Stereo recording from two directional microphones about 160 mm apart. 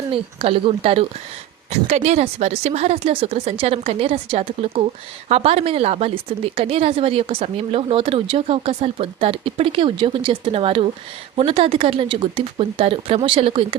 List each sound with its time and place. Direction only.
0.1 s speech: 35° right (ahead or behind)